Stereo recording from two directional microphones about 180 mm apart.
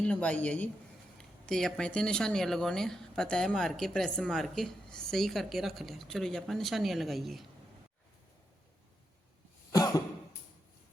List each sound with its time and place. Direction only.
0.0 s a woman's voice: 5° left (ahead or behind)
9.7 s cough: 20° left (ahead or behind)